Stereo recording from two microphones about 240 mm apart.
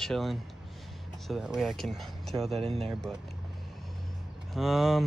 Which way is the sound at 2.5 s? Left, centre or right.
Right.